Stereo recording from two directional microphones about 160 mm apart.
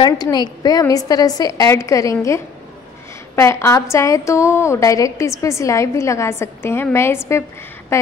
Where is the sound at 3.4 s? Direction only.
15° left (ahead or behind).